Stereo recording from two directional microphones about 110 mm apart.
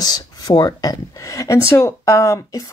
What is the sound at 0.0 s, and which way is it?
Speech, 35° left (ahead or behind).